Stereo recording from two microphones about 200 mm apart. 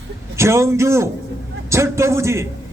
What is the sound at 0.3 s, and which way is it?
A man's voice, 15° right (ahead or behind).